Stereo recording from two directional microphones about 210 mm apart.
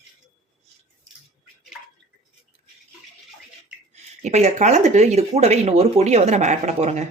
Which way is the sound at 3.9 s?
30° right (ahead or behind).